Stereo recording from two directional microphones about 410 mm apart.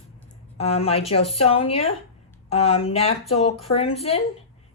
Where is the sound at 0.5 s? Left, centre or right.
Centre.